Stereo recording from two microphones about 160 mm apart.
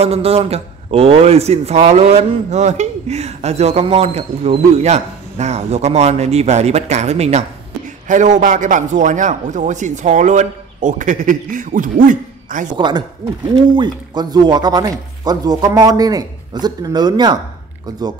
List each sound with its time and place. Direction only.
0.0 s a man's voice: 40° right (ahead or behind); by 12.6 s 55° right (ahead or behind)
12.7 s speech: 30° right (ahead or behind)